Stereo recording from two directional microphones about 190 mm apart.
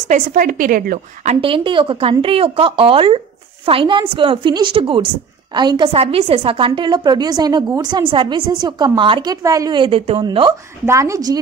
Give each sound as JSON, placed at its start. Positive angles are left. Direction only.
{"t": 0.1, "sound": "a woman's voice", "side_deg": -45}